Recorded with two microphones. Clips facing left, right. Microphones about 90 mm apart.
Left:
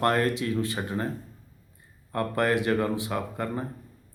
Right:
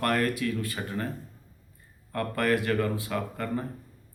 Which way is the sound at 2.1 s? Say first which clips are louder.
Left 2 dB; 20° left (ahead or behind).